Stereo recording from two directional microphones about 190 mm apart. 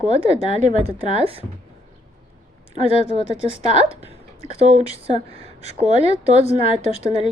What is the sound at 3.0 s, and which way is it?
Speech, 35° left (ahead or behind).